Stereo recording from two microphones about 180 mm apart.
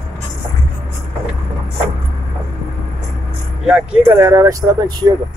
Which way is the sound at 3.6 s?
10° right (ahead or behind).